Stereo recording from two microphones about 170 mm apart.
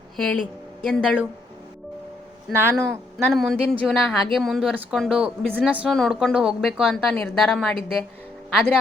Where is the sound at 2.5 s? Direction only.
15° right (ahead or behind).